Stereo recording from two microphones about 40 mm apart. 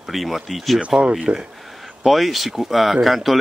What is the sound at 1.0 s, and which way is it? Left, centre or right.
Speech, right.